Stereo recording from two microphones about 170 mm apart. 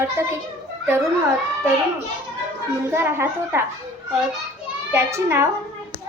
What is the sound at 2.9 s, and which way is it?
Speech, 15° right (ahead or behind).